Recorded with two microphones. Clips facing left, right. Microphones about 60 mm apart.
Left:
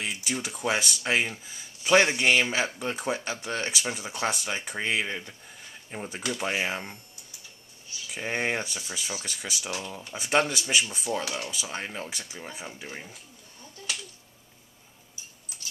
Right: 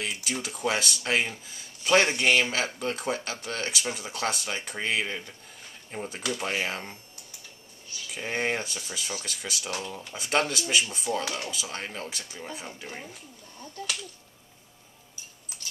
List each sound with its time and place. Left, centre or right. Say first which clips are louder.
0.1 s speech: left 1 dB; centre
8.1 s speech: even; centre